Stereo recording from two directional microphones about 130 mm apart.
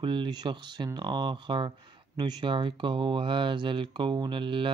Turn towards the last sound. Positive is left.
turn(degrees=-40)  # may be behind; listen again after turning